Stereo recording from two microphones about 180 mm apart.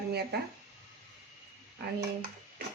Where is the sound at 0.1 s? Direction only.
65° right (ahead or behind).